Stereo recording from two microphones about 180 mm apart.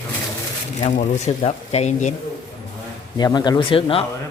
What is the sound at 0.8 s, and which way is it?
Speech, 40° left (ahead or behind).